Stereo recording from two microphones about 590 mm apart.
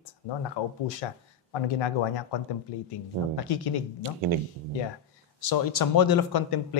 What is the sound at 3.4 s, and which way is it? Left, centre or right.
Speech, left.